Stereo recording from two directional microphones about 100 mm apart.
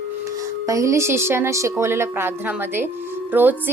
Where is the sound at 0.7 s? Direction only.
30° right (ahead or behind).